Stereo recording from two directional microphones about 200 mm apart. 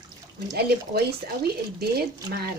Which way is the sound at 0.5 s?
50° right (ahead or behind).